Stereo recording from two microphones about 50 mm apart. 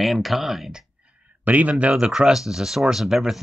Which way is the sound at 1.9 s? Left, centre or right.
Centre.